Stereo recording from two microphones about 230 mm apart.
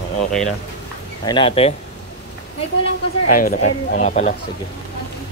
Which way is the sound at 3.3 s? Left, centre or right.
Left.